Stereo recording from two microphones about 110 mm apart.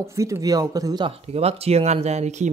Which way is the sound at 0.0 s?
25° right (ahead or behind).